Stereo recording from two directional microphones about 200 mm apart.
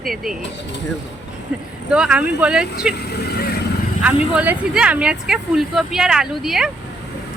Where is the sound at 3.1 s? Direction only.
50° left (ahead or behind).